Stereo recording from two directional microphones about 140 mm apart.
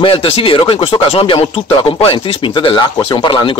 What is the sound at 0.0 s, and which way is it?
Speech, 40° left (ahead or behind).